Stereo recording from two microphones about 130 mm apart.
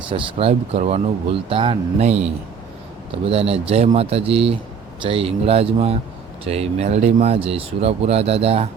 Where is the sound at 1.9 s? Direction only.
55° right (ahead or behind).